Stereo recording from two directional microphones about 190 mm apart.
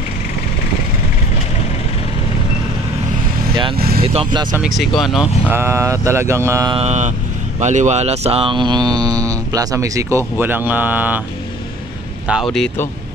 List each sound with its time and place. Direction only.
3.7 s speech: 55° right (ahead or behind)
4.0 s speech: 30° right (ahead or behind)
4.6 s speech: centre (ahead or behind)
5.4 s speech: 10° right (ahead or behind)
6.8 s speech: 40° right (ahead or behind); by 11.2 s 10° right (ahead or behind)
12.5 s speech: 5° left (ahead or behind)